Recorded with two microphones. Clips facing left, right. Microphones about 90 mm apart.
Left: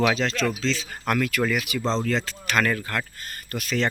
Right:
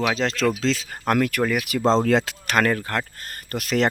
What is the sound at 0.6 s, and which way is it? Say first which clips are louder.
Speech: right 3 dB; 40° right (ahead or behind).